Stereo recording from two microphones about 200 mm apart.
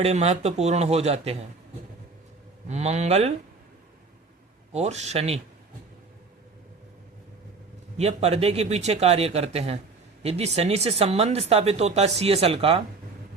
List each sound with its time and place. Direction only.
0.0 s speech: 30° right (ahead or behind)
2.6 s speech: 35° right (ahead or behind)
4.7 s speech: 35° right (ahead or behind)
7.9 s speech: 30° right (ahead or behind)